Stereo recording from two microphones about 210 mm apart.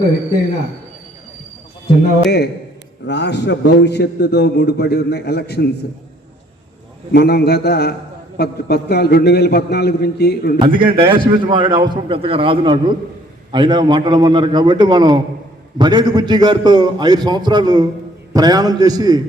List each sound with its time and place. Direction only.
2.2 s a man's voice: 50° left (ahead or behind)
7.1 s a man's voice: 50° left (ahead or behind)
10.6 s a man's voice: 25° right (ahead or behind)